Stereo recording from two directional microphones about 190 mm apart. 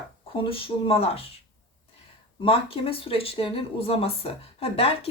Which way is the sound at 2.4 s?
30° left (ahead or behind).